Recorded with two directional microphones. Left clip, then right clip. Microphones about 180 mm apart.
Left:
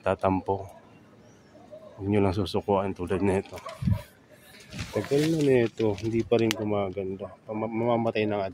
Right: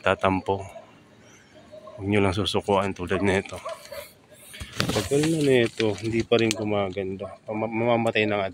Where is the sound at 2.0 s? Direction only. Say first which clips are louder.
Right 3 dB; 5° left (ahead or behind).